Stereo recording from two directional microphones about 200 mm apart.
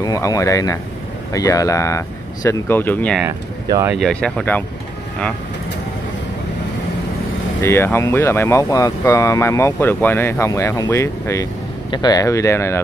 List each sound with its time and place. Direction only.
0.0 s speech: 15° left (ahead or behind)
3.3 s speech: 15° right (ahead or behind)
3.9 s speech: 5° left (ahead or behind)
7.6 s speech: 10° left (ahead or behind)